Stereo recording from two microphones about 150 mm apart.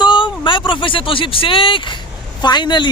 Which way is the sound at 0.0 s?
35° left (ahead or behind).